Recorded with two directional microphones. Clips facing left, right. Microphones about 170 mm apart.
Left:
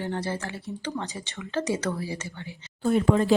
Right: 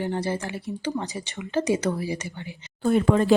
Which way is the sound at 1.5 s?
15° right (ahead or behind).